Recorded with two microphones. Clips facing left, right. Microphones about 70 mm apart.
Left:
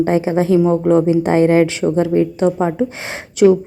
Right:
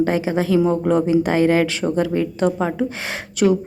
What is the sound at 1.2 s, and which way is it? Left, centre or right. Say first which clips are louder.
Speech: left 4 dB; left.